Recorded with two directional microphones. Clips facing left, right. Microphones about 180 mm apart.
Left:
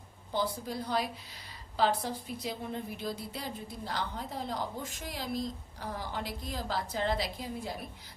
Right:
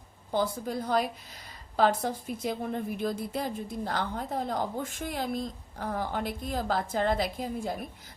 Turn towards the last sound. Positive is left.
turn(degrees=-50)  # may be behind; listen again after turning